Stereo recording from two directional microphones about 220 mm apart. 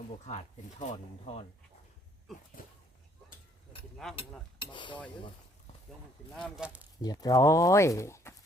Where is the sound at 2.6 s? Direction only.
40° left (ahead or behind).